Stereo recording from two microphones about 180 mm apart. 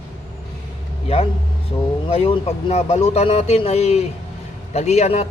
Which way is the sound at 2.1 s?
30° left (ahead or behind).